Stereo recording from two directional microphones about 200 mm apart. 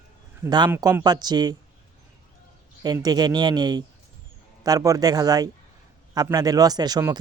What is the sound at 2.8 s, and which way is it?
Speech, 20° right (ahead or behind).